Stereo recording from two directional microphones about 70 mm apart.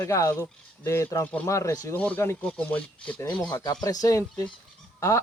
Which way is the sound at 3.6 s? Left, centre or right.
Left.